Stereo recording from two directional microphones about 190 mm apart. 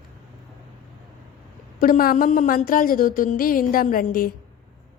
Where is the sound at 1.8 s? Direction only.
45° left (ahead or behind).